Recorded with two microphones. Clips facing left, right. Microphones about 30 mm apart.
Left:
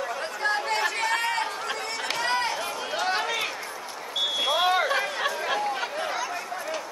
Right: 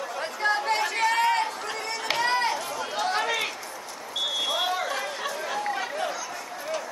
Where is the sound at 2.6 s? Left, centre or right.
Centre.